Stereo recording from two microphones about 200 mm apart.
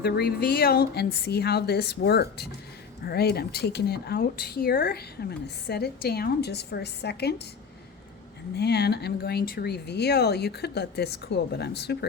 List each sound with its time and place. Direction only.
0.0 s a woman's voice: 50° left (ahead or behind)
8.5 s speech: 55° left (ahead or behind)